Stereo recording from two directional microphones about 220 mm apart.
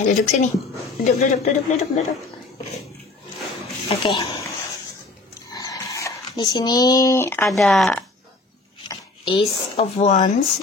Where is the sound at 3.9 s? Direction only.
25° left (ahead or behind); by 8.1 s centre (ahead or behind).